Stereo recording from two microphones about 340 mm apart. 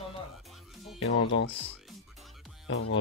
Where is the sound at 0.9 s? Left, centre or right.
Left.